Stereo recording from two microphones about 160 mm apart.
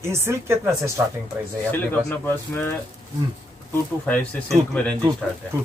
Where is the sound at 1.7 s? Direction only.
15° left (ahead or behind).